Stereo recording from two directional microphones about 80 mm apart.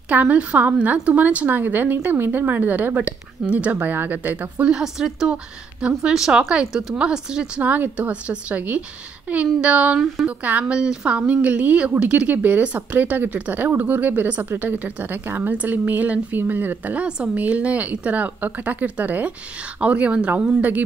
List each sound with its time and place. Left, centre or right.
0.1 s a woman's voice: centre
9.9 s speech: centre
10.2 s a woman's voice: centre